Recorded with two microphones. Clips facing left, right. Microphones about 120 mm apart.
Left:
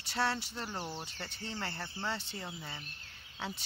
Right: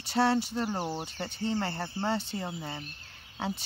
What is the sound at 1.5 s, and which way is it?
Speech, 40° right (ahead or behind).